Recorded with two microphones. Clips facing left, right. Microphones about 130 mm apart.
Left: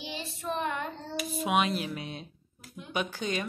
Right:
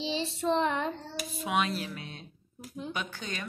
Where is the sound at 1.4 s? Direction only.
15° left (ahead or behind).